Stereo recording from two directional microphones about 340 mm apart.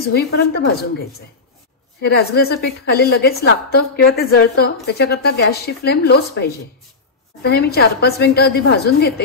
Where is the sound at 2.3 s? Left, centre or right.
Left.